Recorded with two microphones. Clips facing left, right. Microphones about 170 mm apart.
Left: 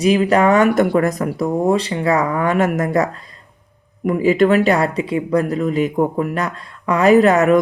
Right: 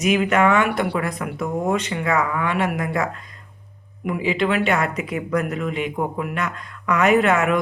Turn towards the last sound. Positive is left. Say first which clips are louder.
# left 6 dB
turn(degrees=40)  # may be behind; listen again after turning